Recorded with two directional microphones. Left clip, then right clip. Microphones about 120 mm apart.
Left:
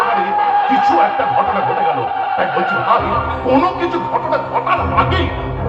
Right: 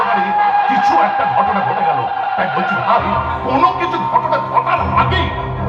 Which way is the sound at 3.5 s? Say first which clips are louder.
Right 1 dB; 30° left (ahead or behind).